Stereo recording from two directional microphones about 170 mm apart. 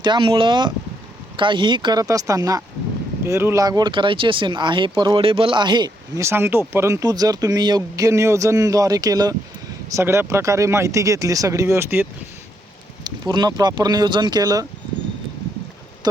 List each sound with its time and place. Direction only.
0.0 s speech: 30° right (ahead or behind); by 12.0 s 15° right (ahead or behind)
13.1 s speech: 25° right (ahead or behind)